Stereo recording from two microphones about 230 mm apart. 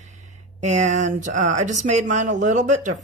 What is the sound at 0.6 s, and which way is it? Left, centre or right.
Speech, right.